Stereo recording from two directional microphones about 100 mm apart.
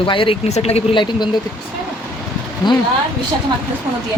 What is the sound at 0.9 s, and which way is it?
Speech, 50° left (ahead or behind).